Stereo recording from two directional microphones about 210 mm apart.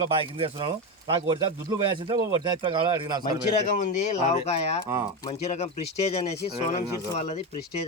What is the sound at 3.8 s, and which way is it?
Speech, 35° left (ahead or behind).